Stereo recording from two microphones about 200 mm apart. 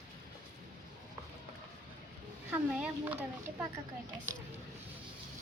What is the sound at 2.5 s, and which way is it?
Speech, 5° right (ahead or behind).